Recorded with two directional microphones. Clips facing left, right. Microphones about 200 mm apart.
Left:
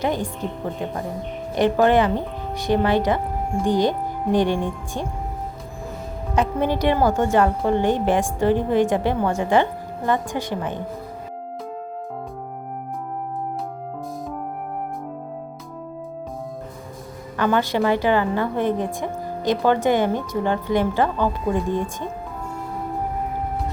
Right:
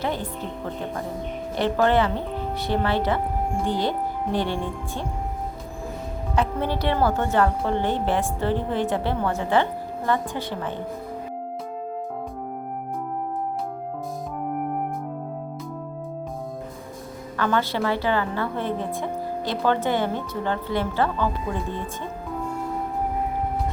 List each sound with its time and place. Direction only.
0.0 s a woman's voice: 15° left (ahead or behind)
1.5 s a woman's voice: 15° left (ahead or behind)
6.3 s a woman's voice: 15° left (ahead or behind)
17.3 s a woman's voice: 15° left (ahead or behind)